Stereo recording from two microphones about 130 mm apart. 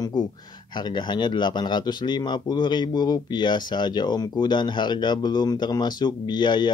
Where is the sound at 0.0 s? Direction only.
35° left (ahead or behind).